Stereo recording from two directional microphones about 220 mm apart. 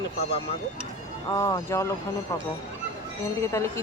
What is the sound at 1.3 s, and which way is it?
Speech, 15° left (ahead or behind).